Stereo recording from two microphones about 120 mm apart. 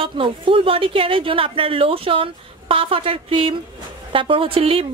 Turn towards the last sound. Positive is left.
turn(degrees=-50)  # may be behind; listen again after turning